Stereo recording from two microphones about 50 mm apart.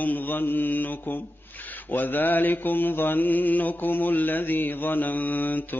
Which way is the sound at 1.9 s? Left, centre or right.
Left.